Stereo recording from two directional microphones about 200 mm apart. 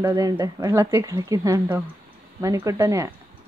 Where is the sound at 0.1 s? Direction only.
15° right (ahead or behind).